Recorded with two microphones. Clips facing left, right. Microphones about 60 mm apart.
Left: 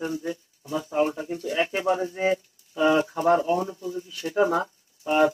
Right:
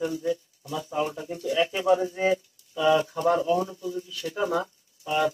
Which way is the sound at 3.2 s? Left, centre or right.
Left.